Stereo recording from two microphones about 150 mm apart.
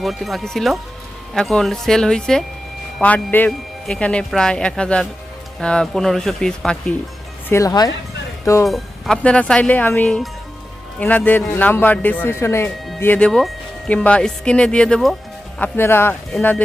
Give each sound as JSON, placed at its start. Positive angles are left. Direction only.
{"t": 0.0, "sound": "speech", "side_deg": 0}
{"t": 7.5, "sound": "speech", "side_deg": 25}
{"t": 8.6, "sound": "speech", "side_deg": 0}
{"t": 11.3, "sound": "speech", "side_deg": 15}